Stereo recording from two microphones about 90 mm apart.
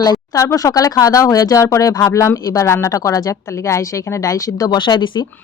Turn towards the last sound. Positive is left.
turn(degrees=60)  # may be behind; listen again after turning